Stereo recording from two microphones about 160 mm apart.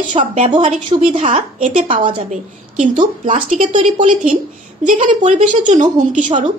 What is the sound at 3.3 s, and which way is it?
A woman's voice, 55° right (ahead or behind).